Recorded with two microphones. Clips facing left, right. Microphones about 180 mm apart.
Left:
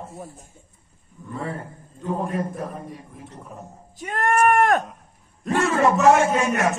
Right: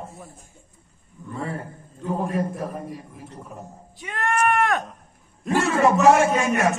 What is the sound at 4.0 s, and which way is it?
Speech, 45° left (ahead or behind).